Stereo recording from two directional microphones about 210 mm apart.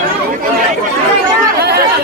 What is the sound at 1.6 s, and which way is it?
Chatter, 50° right (ahead or behind).